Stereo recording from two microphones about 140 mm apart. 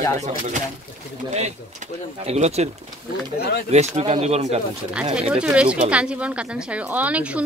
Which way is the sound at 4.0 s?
45° right (ahead or behind).